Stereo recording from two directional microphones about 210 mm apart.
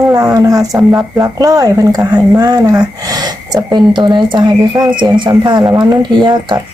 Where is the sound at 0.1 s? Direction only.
15° right (ahead or behind).